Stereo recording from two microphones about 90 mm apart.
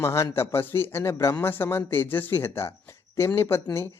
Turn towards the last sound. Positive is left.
turn(degrees=30)  # may be behind; listen again after turning